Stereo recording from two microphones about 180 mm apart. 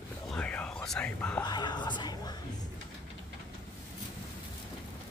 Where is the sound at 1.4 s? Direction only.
25° left (ahead or behind).